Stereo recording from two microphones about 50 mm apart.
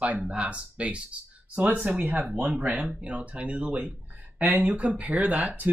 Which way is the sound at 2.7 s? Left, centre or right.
Right.